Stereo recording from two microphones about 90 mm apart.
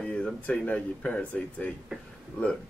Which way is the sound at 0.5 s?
15° left (ahead or behind).